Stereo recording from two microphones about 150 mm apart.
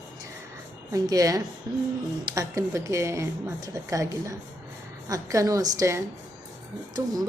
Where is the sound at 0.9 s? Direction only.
20° right (ahead or behind).